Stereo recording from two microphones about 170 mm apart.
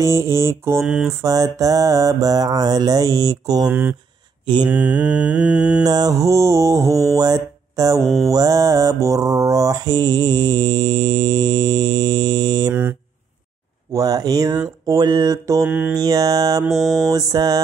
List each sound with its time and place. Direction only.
0.0 s mantra: 15° right (ahead or behind)
0.8 s mantra: 5° right (ahead or behind)
1.2 s mantra: 20° right (ahead or behind)
3.6 s mantra: 10° right (ahead or behind)
5.9 s mantra: 20° right (ahead or behind)
7.2 s speech: 20° right (ahead or behind)
8.3 s mantra: 20° right (ahead or behind)
13.9 s mantra: 20° right (ahead or behind)
15.6 s mantra: 5° right (ahead or behind)
16.0 s mantra: 20° right (ahead or behind)
16.7 s mantra: centre (ahead or behind)
17.1 s mantra: 20° right (ahead or behind)